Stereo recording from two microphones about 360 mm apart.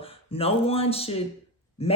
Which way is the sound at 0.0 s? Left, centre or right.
Centre.